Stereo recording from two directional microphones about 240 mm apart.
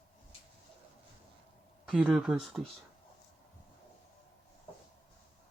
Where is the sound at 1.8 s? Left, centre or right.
Centre.